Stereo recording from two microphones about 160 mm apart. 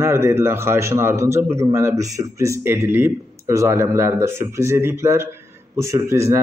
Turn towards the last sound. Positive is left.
turn(degrees=-20)  # may be behind; listen again after turning